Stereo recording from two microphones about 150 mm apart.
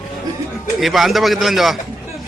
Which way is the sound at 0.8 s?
Centre (ahead or behind).